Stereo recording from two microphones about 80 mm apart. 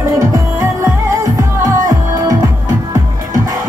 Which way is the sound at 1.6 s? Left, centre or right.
Right.